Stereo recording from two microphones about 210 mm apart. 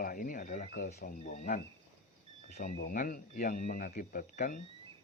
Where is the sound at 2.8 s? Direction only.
40° left (ahead or behind).